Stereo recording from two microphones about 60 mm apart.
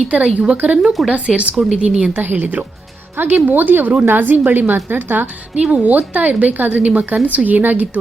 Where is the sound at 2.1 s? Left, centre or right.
Right.